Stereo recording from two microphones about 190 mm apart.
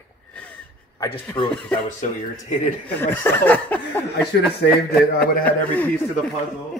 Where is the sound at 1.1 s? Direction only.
30° left (ahead or behind).